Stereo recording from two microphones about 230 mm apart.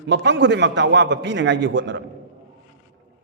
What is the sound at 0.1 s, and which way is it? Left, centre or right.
A man's voice, right.